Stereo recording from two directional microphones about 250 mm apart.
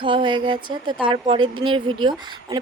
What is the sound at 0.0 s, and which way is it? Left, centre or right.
A woman's voice, centre.